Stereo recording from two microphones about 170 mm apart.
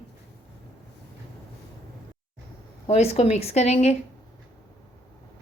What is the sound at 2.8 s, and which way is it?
A woman's voice, 40° left (ahead or behind).